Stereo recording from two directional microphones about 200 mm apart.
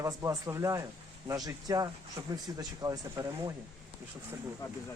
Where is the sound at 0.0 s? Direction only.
15° right (ahead or behind).